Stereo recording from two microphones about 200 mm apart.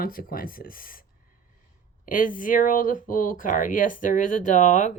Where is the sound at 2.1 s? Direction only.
40° left (ahead or behind).